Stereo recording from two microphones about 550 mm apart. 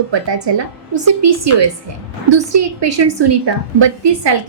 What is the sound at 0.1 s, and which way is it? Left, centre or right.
Speech, right.